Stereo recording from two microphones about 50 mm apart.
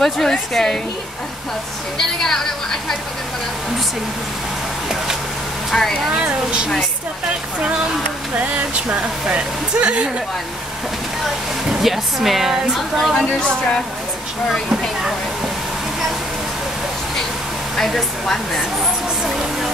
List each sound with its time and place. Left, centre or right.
0.0 s speech: centre
2.0 s a sound: centre
5.7 s speech: centre
6.2 s speech: right
8.4 s speech: right
11.7 s speech: centre
17.7 s speech: centre